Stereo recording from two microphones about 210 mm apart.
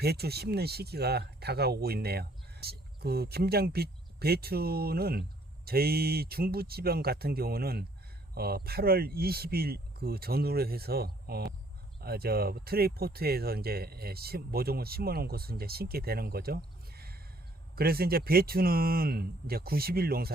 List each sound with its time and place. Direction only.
0.0 s speech: 50° right (ahead or behind)